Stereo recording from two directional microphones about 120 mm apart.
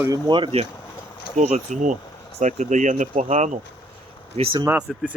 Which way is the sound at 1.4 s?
70° right (ahead or behind).